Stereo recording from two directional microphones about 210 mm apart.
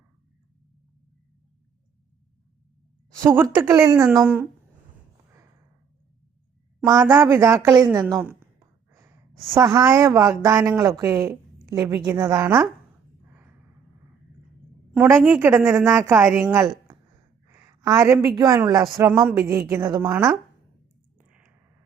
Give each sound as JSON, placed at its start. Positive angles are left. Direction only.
{"t": 3.2, "sound": "a woman's voice", "side_deg": -15}
{"t": 6.8, "sound": "a woman's voice", "side_deg": -15}
{"t": 8.5, "sound": "gasp", "side_deg": -15}
{"t": 9.6, "sound": "a woman's voice", "side_deg": -15}
{"t": 14.9, "sound": "a woman's voice", "side_deg": -10}
{"t": 17.5, "sound": "a sound", "side_deg": -15}
{"t": 18.3, "sound": "a woman's voice", "side_deg": -15}
{"t": 21.2, "sound": "clicking", "side_deg": -5}